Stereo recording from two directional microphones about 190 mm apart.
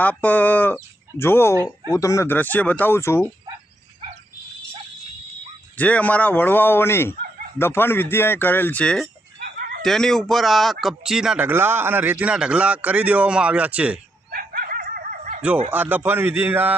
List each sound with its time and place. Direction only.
0.0 s speech: 10° left (ahead or behind)
5.7 s speech: 10° left (ahead or behind)
9.4 s a sound: 55° right (ahead or behind)
9.8 s speech: centre (ahead or behind)
14.3 s dog: 50° right (ahead or behind)
15.7 s speech: 10° right (ahead or behind)